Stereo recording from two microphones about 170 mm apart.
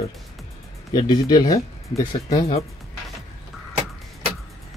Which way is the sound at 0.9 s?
25° left (ahead or behind).